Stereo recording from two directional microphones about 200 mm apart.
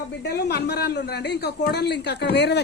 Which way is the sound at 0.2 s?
55° left (ahead or behind).